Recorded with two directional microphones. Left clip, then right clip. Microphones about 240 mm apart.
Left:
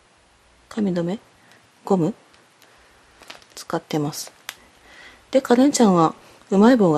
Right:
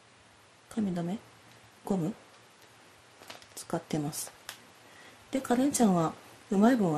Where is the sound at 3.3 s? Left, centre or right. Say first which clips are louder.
Left 9 dB; centre.